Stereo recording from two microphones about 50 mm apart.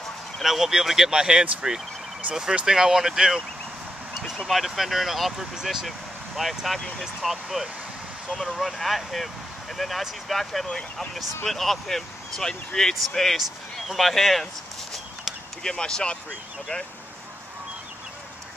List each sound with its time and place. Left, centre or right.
0.4 s speech: centre
4.5 s speech: centre
10.7 s speech: centre
11.4 s speech: centre
15.6 s speech: centre